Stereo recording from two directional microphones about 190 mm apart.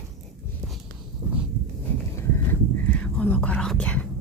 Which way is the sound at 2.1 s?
10° left (ahead or behind).